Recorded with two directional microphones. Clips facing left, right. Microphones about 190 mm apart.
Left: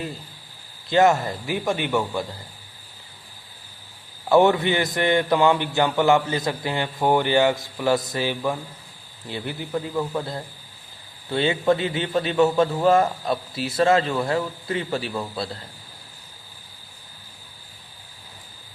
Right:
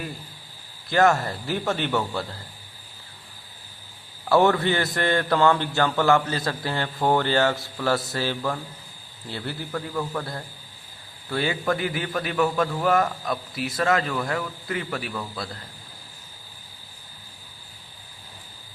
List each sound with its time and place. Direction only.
0.9 s a man's voice: 20° left (ahead or behind)
4.3 s a man's voice: 20° left (ahead or behind)